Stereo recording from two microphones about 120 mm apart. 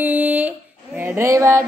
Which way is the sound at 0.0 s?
15° right (ahead or behind).